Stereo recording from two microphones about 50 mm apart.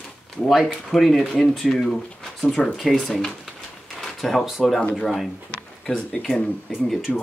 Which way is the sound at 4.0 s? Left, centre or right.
Centre.